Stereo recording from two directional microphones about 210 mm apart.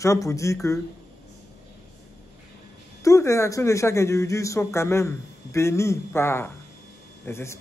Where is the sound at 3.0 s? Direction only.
15° left (ahead or behind).